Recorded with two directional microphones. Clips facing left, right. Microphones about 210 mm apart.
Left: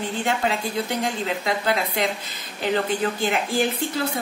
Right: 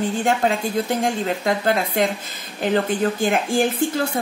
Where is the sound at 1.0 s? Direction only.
50° right (ahead or behind).